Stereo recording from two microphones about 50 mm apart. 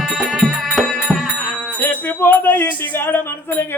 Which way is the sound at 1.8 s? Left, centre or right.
Left.